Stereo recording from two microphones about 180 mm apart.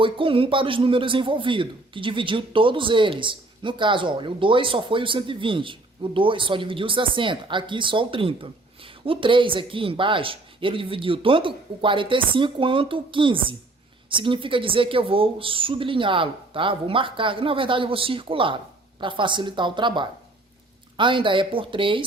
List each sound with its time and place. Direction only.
0.0 s a man's voice: 30° right (ahead or behind)